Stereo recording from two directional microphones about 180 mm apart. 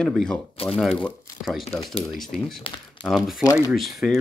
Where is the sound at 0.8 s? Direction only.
Centre (ahead or behind).